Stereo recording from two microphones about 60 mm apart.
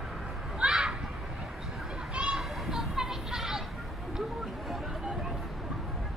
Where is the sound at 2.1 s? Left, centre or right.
Centre.